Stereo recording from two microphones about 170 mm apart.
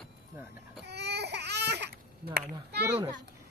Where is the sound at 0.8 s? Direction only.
80° right.